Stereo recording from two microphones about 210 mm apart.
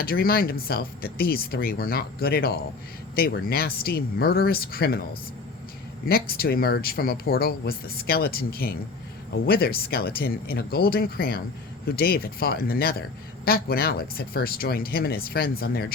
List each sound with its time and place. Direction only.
0.0 s speech: 45° left (ahead or behind)
6.1 s speech: 45° left (ahead or behind)